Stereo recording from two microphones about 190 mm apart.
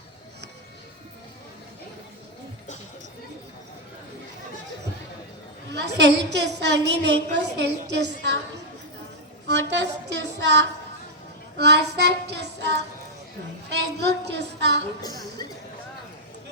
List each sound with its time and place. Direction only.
5.7 s a woman's voice: 65° right (ahead or behind)
9.5 s a woman's voice: 65° right (ahead or behind)
15.0 s speech: 20° left (ahead or behind)